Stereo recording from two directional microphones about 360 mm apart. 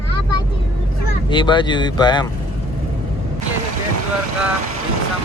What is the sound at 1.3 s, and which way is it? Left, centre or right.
Speech, centre.